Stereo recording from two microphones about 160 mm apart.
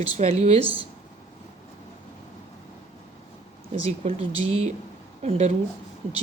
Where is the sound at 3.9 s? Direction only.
40° right (ahead or behind).